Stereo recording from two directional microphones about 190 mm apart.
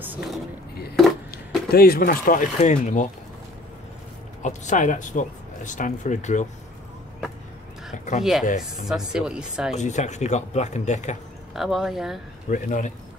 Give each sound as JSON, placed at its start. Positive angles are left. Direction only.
{"t": 0.0, "sound": "a sound", "side_deg": -10}
{"t": 1.7, "sound": "speech", "side_deg": 50}
{"t": 4.4, "sound": "speech", "side_deg": 40}
{"t": 8.2, "sound": "speech", "side_deg": 0}
{"t": 8.5, "sound": "speech", "side_deg": 45}
{"t": 8.8, "sound": "speech", "side_deg": -5}
{"t": 9.8, "sound": "speech", "side_deg": 40}
{"t": 11.5, "sound": "speech", "side_deg": 0}
{"t": 12.4, "sound": "speech", "side_deg": 45}